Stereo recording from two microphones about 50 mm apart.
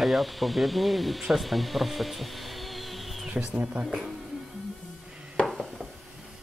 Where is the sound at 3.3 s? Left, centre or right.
Right.